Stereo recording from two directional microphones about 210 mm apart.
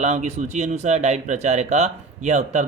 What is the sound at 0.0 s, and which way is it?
Speech, 30° right (ahead or behind).